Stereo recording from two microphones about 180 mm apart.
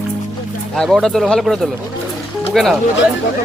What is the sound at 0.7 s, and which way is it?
Speech, centre (ahead or behind).